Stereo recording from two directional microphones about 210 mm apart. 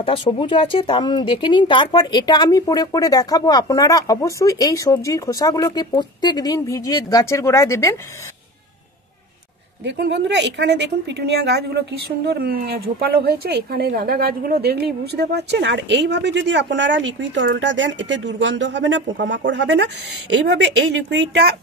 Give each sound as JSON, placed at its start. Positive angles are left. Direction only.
{"t": 0.0, "sound": "speech", "side_deg": 25}
{"t": 9.8, "sound": "a woman's voice", "side_deg": -55}